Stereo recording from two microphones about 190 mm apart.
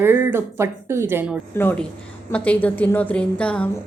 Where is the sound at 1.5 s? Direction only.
10° left (ahead or behind).